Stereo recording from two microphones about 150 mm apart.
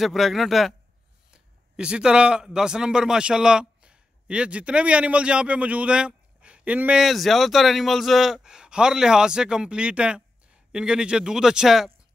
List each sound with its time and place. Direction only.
0.0 s a man's voice: centre (ahead or behind)